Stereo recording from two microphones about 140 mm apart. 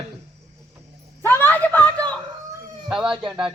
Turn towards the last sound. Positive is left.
turn(degrees=-5)  # may be behind; listen again after turning